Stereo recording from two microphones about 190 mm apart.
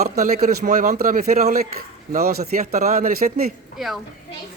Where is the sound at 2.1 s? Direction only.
55° right (ahead or behind).